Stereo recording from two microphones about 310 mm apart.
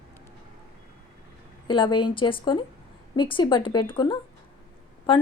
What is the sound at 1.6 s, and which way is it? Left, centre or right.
A woman's voice, centre.